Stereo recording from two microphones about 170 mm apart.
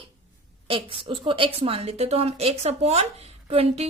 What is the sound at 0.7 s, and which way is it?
A woman's voice, 30° right (ahead or behind).